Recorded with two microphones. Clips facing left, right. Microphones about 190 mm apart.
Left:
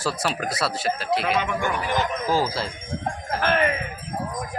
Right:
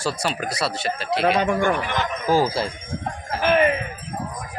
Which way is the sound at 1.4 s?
40° right (ahead or behind).